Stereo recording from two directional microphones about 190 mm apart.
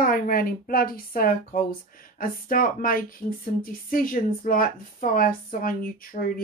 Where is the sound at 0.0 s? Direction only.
50° left (ahead or behind).